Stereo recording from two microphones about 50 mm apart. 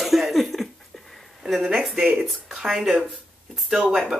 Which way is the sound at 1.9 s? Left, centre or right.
Centre.